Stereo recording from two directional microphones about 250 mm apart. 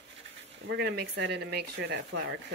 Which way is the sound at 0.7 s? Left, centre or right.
Right.